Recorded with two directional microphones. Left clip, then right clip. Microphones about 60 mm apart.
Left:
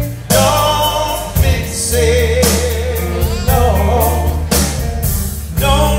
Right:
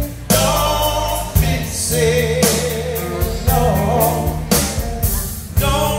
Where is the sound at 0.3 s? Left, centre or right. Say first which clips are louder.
Left 4 dB; left.